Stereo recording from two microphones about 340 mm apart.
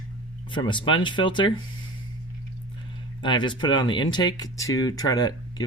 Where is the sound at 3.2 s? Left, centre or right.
Centre.